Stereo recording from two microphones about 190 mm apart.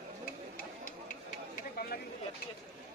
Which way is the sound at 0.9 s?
45° left (ahead or behind).